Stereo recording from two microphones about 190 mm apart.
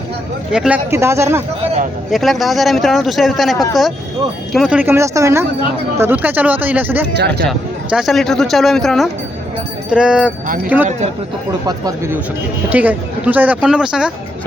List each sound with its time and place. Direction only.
0.5 s speech: 5° right (ahead or behind)
2.0 s speech: centre (ahead or behind)